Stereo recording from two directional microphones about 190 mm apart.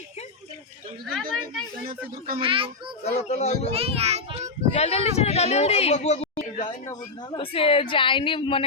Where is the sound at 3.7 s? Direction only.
30° right (ahead or behind).